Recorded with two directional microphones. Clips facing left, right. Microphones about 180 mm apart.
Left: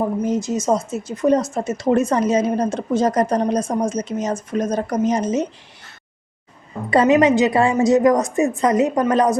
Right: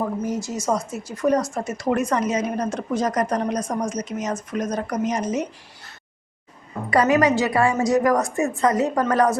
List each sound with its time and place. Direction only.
0.0 s speech: 20° left (ahead or behind)
6.9 s speech: 25° left (ahead or behind)